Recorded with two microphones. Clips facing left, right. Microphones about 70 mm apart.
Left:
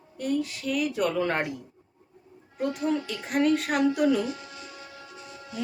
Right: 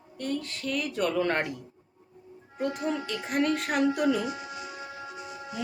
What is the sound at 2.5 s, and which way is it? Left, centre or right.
A woman's voice, centre.